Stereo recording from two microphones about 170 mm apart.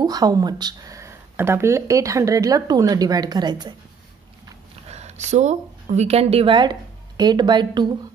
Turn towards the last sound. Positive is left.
turn(degrees=-25)  # may be behind; listen again after turning